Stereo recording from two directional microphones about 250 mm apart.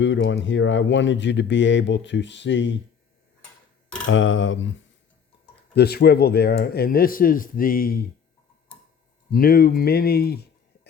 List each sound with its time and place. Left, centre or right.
0.0 s speech: left
4.1 s speech: left
5.7 s speech: left
9.3 s speech: left